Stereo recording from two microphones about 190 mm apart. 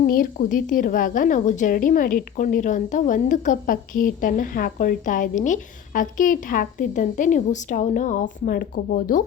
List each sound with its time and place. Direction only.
0.0 s a woman's voice: 50° left (ahead or behind)